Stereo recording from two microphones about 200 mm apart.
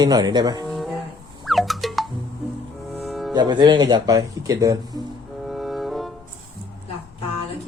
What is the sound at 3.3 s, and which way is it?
Speech, 20° right (ahead or behind).